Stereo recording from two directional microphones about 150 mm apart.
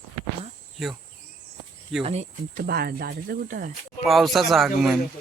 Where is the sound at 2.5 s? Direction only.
90° right; by 3.7 s 65° right (ahead or behind).